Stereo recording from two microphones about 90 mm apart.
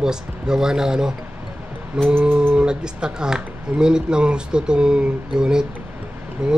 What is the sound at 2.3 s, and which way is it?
Speech, 25° right (ahead or behind).